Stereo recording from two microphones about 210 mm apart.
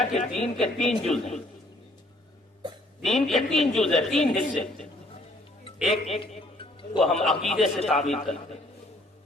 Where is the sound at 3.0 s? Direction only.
Centre (ahead or behind).